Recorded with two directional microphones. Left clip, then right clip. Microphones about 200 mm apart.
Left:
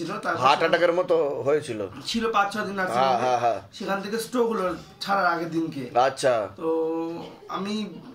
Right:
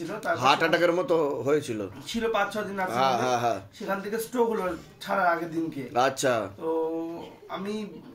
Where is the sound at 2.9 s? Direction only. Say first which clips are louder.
Left 3 dB; 35° right (ahead or behind).